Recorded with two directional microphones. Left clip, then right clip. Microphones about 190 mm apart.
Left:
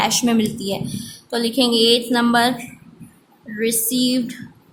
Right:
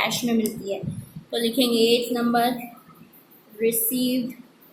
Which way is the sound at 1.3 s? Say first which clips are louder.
Left 4 dB; 25° left (ahead or behind).